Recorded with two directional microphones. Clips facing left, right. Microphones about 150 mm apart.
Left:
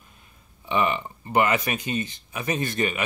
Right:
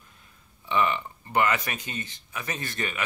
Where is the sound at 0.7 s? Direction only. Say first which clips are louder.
Left 2 dB; 15° left (ahead or behind).